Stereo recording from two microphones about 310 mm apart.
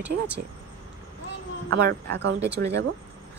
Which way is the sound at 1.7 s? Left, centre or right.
Right.